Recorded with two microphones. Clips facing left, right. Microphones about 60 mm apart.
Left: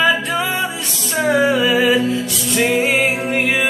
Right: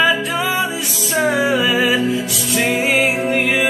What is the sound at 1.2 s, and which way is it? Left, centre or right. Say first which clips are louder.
Music: left 2 dB; centre.